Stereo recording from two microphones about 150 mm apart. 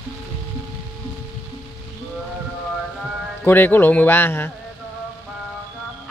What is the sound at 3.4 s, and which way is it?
Speech, 15° left (ahead or behind).